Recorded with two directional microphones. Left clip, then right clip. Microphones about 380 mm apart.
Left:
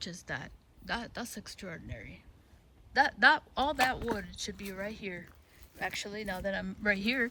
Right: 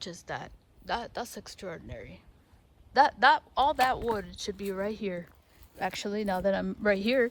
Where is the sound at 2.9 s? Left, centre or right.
Centre.